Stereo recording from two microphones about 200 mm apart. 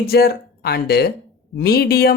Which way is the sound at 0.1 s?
50° left (ahead or behind).